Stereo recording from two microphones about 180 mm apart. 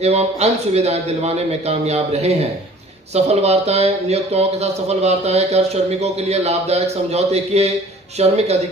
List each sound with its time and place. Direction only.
0.0 s speech: 35° right (ahead or behind)